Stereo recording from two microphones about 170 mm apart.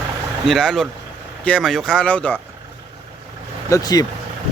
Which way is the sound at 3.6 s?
20° left (ahead or behind).